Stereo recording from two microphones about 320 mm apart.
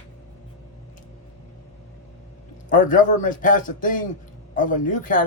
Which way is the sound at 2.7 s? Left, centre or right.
Left.